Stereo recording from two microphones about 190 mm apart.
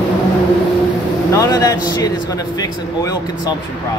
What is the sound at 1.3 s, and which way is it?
A man's voice, 20° left (ahead or behind).